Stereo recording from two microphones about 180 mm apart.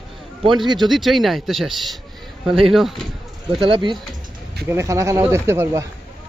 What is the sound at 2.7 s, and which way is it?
Speech, centre (ahead or behind).